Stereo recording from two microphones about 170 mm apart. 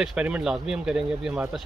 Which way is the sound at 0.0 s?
5° right (ahead or behind).